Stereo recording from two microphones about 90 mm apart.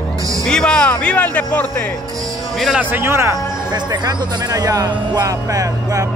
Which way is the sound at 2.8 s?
25° right (ahead or behind).